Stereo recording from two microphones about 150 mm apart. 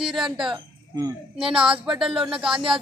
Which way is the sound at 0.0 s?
5° right (ahead or behind).